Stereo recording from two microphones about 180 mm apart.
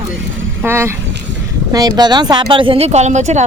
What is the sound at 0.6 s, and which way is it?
Speech, 15° right (ahead or behind).